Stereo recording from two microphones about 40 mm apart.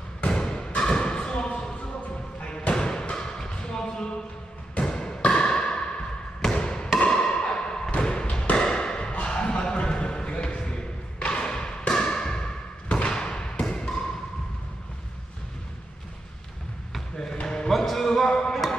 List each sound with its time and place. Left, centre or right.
0.3 s a sound: centre
2.4 s thump: left
3.3 s basketball bounce: centre
4.7 s a sound: left
6.5 s basketball bounce: left
7.0 s a sound: left
8.0 s thump: left
9.1 s a sound: left
10.6 s music: left
13.1 s thump: left
17.3 s basketball bounce: left
17.7 s music: centre
18.0 s music: centre
18.5 s music: centre